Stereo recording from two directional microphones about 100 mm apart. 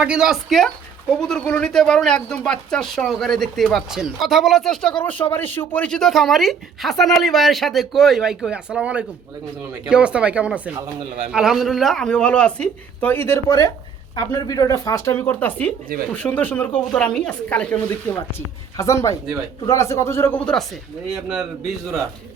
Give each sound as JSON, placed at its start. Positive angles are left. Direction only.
{"t": 0.0, "sound": "speech", "side_deg": -10}
{"t": 5.3, "sound": "speech", "side_deg": 20}
{"t": 5.9, "sound": "speech", "side_deg": 5}
{"t": 14.2, "sound": "speech", "side_deg": 50}
{"t": 14.4, "sound": "speech", "side_deg": 40}
{"t": 18.8, "sound": "speech", "side_deg": 30}
{"t": 20.4, "sound": "speech", "side_deg": 5}
{"t": 21.1, "sound": "speech", "side_deg": -5}